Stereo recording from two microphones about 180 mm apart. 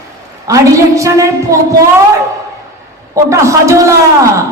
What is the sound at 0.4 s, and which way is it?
A woman's voice, 15° right (ahead or behind).